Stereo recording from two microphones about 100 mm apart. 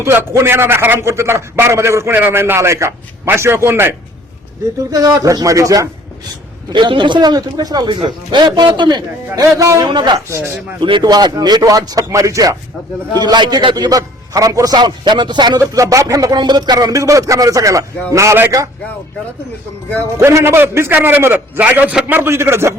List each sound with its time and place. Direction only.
0.0 s a man's voice: 25° right (ahead or behind)
4.8 s speech: 35° right (ahead or behind)
6.7 s speech: 50° right (ahead or behind)
10.2 s a man's voice: 30° right (ahead or behind)
10.8 s speech: 50° right (ahead or behind); by 12.5 s 35° right (ahead or behind)
13.1 s speech: 45° right (ahead or behind)
15.7 s a man's voice: 35° right (ahead or behind)
20.0 s a man's voice: 25° right (ahead or behind)